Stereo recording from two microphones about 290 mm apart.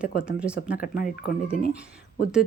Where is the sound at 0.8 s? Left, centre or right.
Left.